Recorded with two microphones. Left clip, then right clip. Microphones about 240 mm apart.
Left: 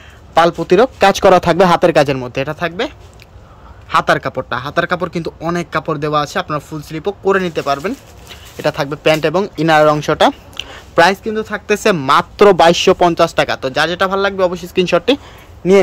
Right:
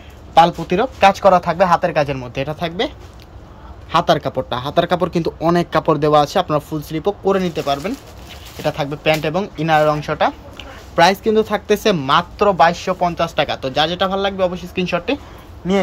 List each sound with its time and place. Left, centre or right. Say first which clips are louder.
0.3 s speech: left 1 dB; left
3.9 s speech: left 2 dB; centre; by 10.8 s left
11.2 s speech: right 2 dB; centre
12.5 s speech: left 5 dB; left
15.6 s a man's voice: left 9 dB; left